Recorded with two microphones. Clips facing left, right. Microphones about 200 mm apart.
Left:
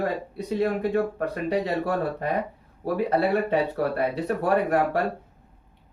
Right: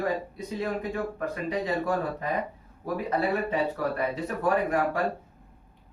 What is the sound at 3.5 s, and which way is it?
Speech, 65° left (ahead or behind).